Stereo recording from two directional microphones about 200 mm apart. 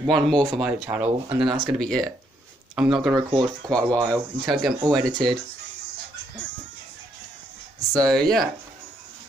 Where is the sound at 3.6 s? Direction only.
5° left (ahead or behind).